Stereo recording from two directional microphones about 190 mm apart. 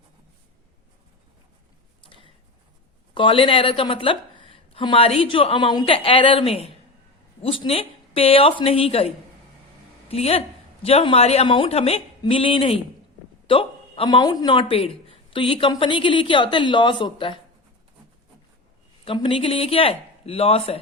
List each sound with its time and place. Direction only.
2.0 s a sound: 25° left (ahead or behind)
3.2 s a woman's voice: 25° left (ahead or behind)
19.0 s speech: 25° left (ahead or behind)